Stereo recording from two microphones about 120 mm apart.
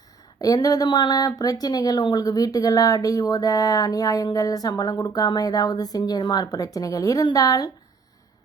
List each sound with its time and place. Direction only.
0.4 s speech: 30° left (ahead or behind)